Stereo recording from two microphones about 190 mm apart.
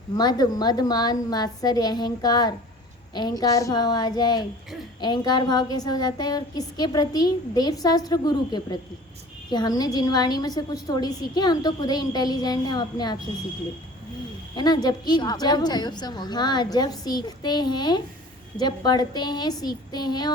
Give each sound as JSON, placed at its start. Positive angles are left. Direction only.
{"t": 0.2, "sound": "a woman's voice", "side_deg": 20}
{"t": 14.5, "sound": "a woman's voice", "side_deg": 20}